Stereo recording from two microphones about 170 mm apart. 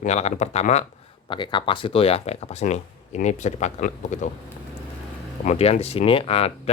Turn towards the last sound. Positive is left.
turn(degrees=35)  # may be behind; listen again after turning